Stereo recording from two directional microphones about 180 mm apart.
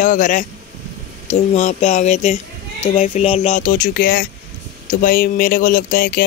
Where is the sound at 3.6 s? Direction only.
50° left (ahead or behind).